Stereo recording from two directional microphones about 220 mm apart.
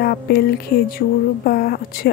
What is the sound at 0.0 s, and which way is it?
Speech, 45° left (ahead or behind).